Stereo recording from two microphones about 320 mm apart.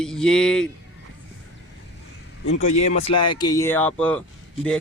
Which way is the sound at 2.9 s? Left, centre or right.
Centre.